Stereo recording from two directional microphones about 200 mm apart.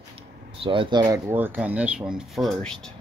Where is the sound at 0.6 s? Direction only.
25° right (ahead or behind).